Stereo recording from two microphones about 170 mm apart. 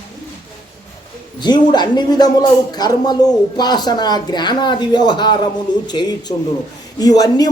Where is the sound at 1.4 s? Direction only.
25° left (ahead or behind).